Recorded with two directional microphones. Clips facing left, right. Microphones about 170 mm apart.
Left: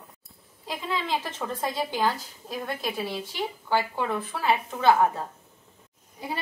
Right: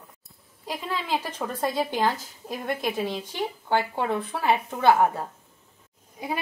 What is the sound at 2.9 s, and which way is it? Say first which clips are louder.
Speech: right 2 dB; 15° right (ahead or behind).